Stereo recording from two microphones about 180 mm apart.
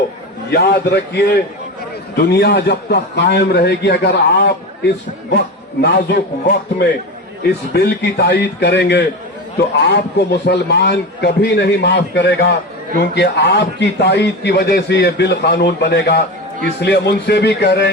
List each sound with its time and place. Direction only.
0.5 s a man's voice: 65° left (ahead or behind)
5.8 s a man's voice: 65° left (ahead or behind)